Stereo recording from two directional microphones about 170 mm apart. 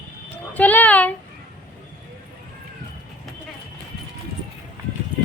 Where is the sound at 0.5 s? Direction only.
10° left (ahead or behind).